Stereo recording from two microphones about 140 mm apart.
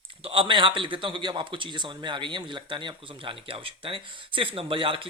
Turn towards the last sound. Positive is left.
turn(degrees=-40)  # may be behind; listen again after turning